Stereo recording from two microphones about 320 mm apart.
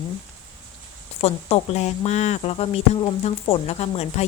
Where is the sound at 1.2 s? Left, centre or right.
Centre.